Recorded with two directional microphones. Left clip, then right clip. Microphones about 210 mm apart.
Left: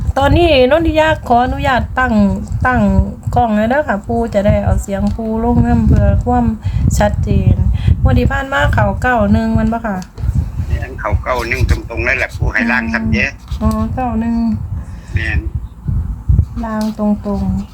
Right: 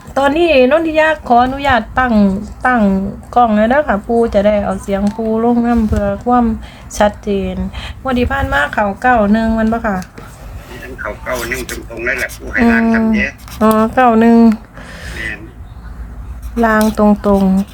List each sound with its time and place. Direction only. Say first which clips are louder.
0.1 s a woman's voice: even; 5° left (ahead or behind); by 8.1 s 15° right (ahead or behind)
8.1 s speech: right 2 dB; centre (ahead or behind)
10.8 s speech: left 3 dB; 45° left (ahead or behind)
13.6 s speech: right 10 dB; 45° right (ahead or behind)
15.2 s speech: left 2 dB; 50° left (ahead or behind)
16.6 s speech: right 10 dB; 45° right (ahead or behind)